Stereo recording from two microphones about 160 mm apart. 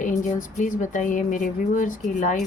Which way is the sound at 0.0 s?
55° left (ahead or behind).